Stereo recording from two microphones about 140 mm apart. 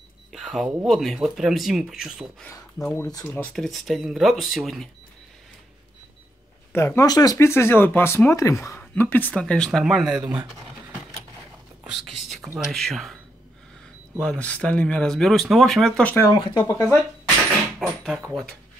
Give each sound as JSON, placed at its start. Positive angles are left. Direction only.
{"t": 0.3, "sound": "speech", "side_deg": 0}
{"t": 2.8, "sound": "speech", "side_deg": 10}
{"t": 3.3, "sound": "speech", "side_deg": 0}
{"t": 6.7, "sound": "speech", "side_deg": 20}
{"t": 11.8, "sound": "speech", "side_deg": 0}
{"t": 14.4, "sound": "speech", "side_deg": 10}
{"t": 16.3, "sound": "speech", "side_deg": 35}
{"t": 16.7, "sound": "speech", "side_deg": 25}
{"t": 17.7, "sound": "a sound", "side_deg": 0}
{"t": 18.3, "sound": "speech", "side_deg": 5}